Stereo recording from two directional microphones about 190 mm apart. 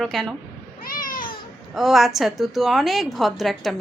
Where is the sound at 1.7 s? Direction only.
Centre (ahead or behind).